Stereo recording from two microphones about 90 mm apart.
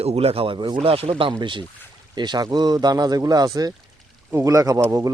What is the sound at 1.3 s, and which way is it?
Speech, 60° right (ahead or behind).